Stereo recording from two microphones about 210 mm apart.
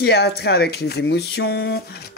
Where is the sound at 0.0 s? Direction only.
50° left (ahead or behind).